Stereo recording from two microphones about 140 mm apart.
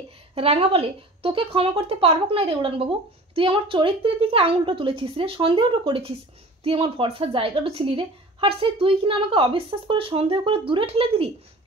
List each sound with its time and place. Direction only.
0.3 s a woman's voice: 45° right (ahead or behind)